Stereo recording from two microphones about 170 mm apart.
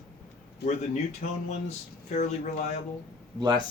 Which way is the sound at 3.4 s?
25° right (ahead or behind).